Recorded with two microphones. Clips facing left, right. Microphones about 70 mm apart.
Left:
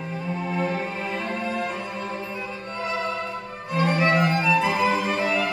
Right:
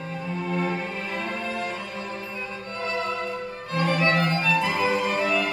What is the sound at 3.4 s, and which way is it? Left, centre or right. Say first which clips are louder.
Violin: left 3 dB; centre.